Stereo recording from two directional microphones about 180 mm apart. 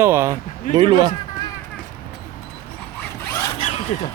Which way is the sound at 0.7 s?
25° right (ahead or behind).